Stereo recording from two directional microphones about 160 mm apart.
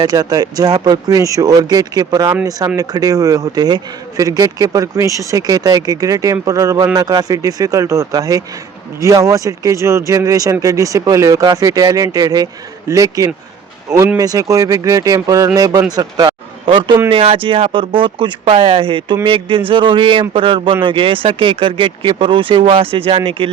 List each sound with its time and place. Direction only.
0.0 s speech: 25° right (ahead or behind)